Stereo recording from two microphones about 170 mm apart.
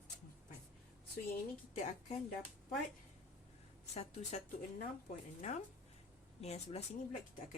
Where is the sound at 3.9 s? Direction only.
40° left (ahead or behind).